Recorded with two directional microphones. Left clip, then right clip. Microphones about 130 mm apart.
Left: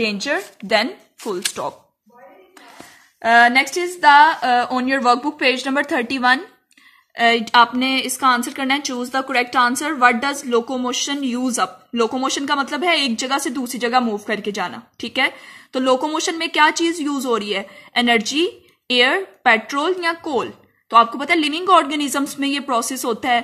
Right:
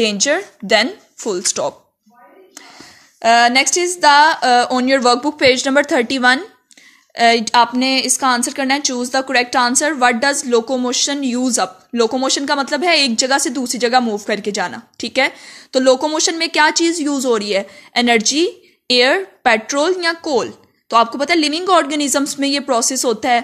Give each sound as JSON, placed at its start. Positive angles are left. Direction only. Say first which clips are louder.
{"t": 0.0, "sound": "speech", "louder": "right 5 dB", "side_deg": -35}
{"t": 3.2, "sound": "speech", "louder": "right 1 dB", "side_deg": -55}